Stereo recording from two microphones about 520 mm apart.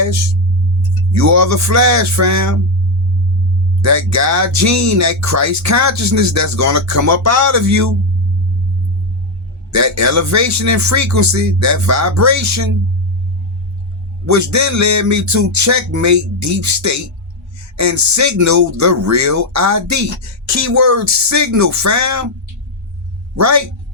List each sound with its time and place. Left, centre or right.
1.1 s speech: right
3.8 s speech: right
9.7 s speech: right
14.3 s speech: right
23.4 s speech: right